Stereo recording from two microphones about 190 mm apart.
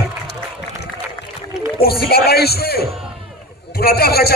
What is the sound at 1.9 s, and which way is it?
A man's voice, 55° left (ahead or behind).